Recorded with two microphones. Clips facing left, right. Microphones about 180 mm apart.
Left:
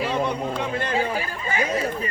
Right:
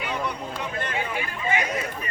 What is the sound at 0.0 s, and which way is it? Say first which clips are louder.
Chatter: left 6 dB; 30° left (ahead or behind).